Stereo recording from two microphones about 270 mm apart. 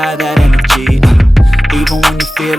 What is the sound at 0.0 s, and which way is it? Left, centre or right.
Music, centre.